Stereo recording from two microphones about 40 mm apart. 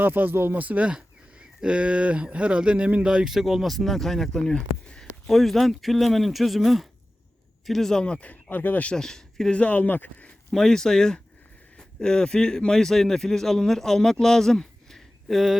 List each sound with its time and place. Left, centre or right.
0.0 s speech: right
0.6 s speech: right
0.9 s speech: right
3.2 s speech: centre
8.0 s speech: left
8.3 s speech: left
9.0 s speech: centre
9.6 s speech: left
10.5 s a man's voice: centre